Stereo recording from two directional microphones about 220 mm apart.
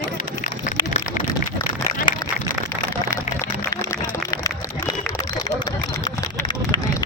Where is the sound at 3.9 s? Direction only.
15° left (ahead or behind).